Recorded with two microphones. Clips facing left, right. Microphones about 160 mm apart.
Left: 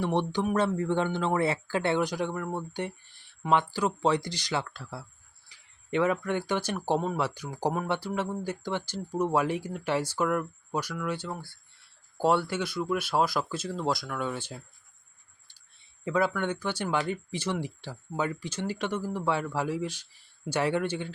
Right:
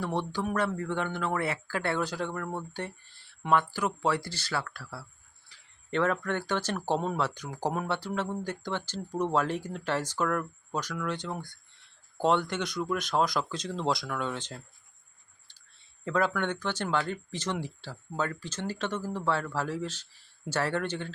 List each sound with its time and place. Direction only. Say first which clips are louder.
0.0 s speech: left 4 dB; 20° left (ahead or behind)
5.5 s speech: left 3 dB; 10° left (ahead or behind)
16.0 s speech: left 1 dB; 10° left (ahead or behind)